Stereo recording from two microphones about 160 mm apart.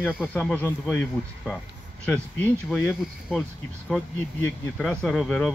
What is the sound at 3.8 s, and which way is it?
Speech, centre (ahead or behind).